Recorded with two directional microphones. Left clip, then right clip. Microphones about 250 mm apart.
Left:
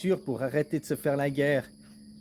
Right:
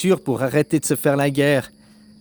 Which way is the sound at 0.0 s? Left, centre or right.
Right.